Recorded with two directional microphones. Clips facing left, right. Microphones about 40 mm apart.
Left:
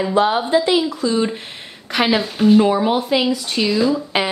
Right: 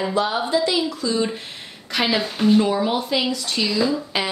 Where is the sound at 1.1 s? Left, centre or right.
Centre.